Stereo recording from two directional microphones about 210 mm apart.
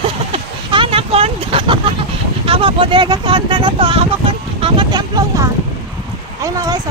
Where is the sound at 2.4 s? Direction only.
25° right (ahead or behind).